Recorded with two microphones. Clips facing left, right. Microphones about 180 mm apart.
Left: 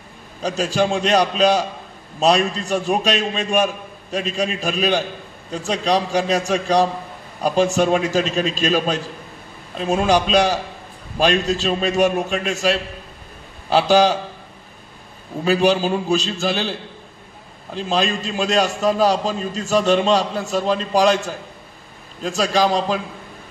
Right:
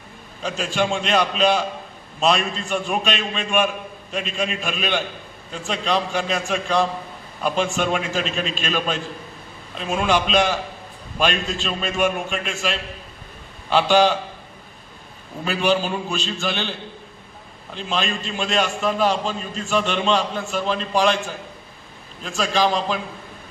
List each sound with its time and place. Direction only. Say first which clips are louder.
0.4 s a man's voice: left 4 dB; 40° left (ahead or behind)
15.4 s a man's voice: left 4 dB; 40° left (ahead or behind)
17.7 s a man's voice: left 5 dB; 40° left (ahead or behind)